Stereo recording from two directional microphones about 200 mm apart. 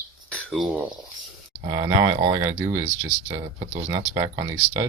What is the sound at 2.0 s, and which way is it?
Speech, 15° right (ahead or behind).